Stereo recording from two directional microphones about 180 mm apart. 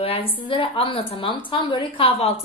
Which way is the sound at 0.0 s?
30° left (ahead or behind).